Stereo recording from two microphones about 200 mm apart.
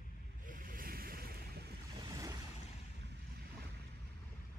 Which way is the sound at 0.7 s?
45° right (ahead or behind).